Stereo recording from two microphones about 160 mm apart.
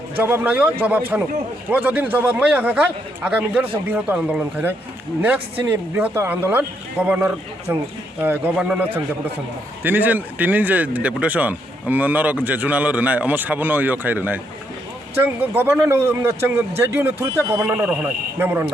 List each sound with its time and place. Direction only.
0.2 s speech: 10° right (ahead or behind)
6.0 s speech: 10° right (ahead or behind)